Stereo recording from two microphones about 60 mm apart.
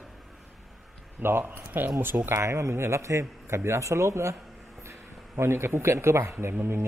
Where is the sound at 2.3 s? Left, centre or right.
Right.